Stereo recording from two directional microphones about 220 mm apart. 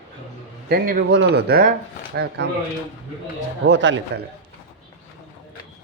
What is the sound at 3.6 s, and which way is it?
Speech, 55° right (ahead or behind).